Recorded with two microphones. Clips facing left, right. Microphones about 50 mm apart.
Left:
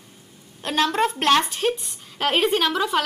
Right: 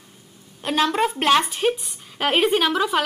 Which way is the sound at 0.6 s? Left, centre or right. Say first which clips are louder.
Right 1 dB; centre.